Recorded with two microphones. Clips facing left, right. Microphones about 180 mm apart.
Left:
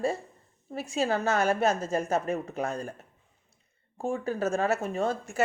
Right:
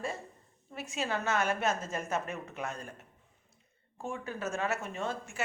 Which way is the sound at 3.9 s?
35° left (ahead or behind).